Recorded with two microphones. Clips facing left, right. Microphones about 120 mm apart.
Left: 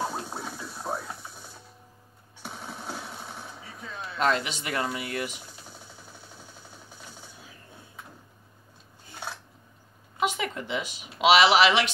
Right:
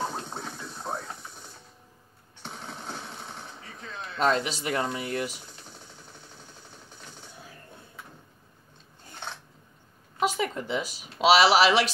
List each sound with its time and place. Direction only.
0.0 s a sound: 10° left (ahead or behind)
2.4 s jackhammer: 10° left (ahead or behind)
4.2 s speech: 35° right (ahead or behind)
10.2 s speech: 40° right (ahead or behind)